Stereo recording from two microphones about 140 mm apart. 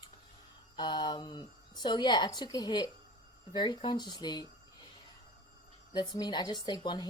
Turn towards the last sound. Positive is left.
turn(degrees=30)  # may be behind; listen again after turning